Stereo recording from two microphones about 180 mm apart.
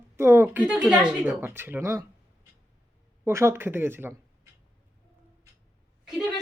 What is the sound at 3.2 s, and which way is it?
Speech, 15° right (ahead or behind).